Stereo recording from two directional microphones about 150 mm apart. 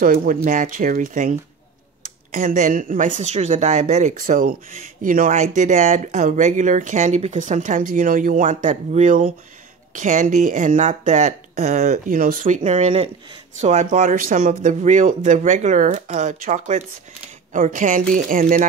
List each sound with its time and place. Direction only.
0.0 s speech: 70° right (ahead or behind)